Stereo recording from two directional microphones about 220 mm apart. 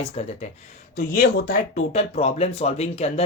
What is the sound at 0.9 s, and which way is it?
Speech, 40° left (ahead or behind).